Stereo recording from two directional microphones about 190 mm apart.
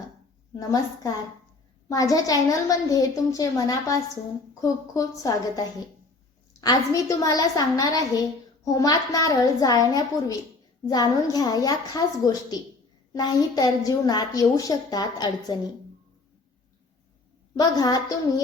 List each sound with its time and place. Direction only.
0.5 s a woman's voice: 20° left (ahead or behind)
17.5 s a woman's voice: 20° left (ahead or behind)